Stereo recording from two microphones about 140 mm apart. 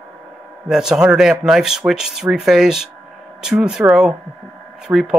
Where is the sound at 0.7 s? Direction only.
5° right (ahead or behind).